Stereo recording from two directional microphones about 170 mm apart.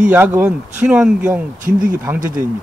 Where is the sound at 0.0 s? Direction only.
10° right (ahead or behind).